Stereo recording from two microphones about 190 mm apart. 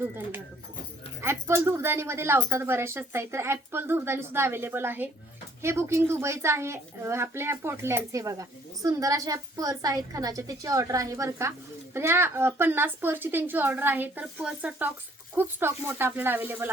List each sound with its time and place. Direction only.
1.2 s a woman's voice: 15° right (ahead or behind)